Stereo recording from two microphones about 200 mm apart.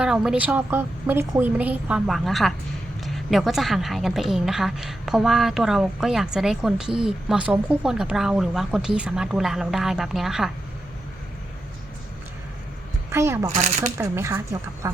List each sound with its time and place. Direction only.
0.0 s a woman's voice: 5° right (ahead or behind)
13.1 s speech: 15° right (ahead or behind)
13.5 s speech: 35° right (ahead or behind)
14.0 s a woman's voice: 10° right (ahead or behind)